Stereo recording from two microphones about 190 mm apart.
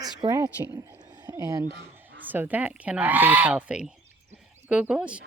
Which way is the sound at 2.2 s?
10° right (ahead or behind).